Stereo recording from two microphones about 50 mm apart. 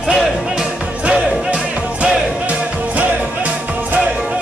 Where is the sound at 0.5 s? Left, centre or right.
Centre.